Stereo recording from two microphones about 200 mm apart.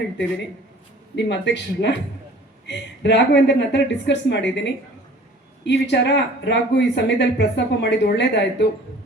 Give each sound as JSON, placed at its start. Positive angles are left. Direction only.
{"t": 1.1, "sound": "speech", "side_deg": 60}